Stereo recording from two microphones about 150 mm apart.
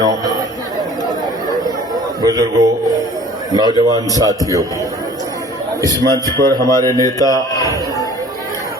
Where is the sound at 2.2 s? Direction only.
25° right (ahead or behind).